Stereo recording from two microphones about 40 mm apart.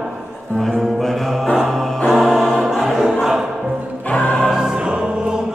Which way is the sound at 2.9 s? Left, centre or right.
Centre.